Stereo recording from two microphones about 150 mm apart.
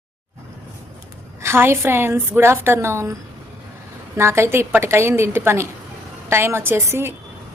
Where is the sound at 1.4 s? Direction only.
15° right (ahead or behind).